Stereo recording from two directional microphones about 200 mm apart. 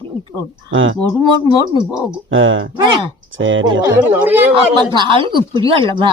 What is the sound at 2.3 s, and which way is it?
Speech, 75° right (ahead or behind).